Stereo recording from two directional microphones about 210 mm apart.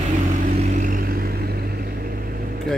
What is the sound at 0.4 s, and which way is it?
Vehicle, 35° right (ahead or behind).